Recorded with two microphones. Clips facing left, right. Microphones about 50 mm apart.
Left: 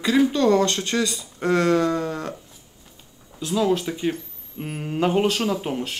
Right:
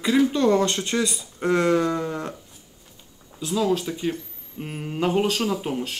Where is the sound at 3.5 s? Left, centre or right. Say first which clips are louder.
Left 1 dB; centre.